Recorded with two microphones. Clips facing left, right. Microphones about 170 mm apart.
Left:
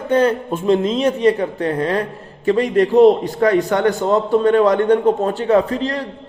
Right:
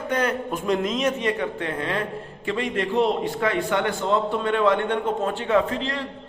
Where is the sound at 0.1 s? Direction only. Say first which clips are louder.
Left 9 dB; 30° left (ahead or behind).